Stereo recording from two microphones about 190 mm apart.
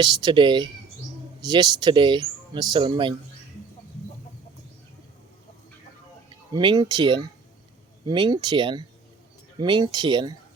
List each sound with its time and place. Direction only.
0.0 s speech: 25° right (ahead or behind)
6.5 s speech: 25° right (ahead or behind)